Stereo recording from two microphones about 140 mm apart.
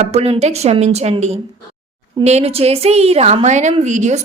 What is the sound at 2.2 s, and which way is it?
A woman's voice, 50° right (ahead or behind).